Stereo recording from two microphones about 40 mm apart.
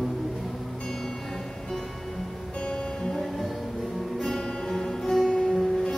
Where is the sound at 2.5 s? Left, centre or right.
Left.